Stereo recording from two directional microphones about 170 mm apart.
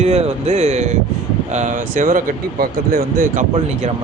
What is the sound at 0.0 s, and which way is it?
Speech, 40° right (ahead or behind).